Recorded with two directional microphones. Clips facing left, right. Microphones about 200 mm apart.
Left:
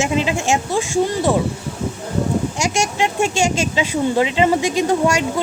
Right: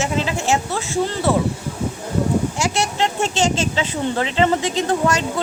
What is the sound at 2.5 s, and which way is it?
Speech, 15° left (ahead or behind).